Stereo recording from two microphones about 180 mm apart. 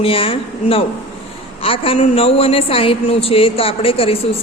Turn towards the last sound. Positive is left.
turn(degrees=30)  # may be behind; listen again after turning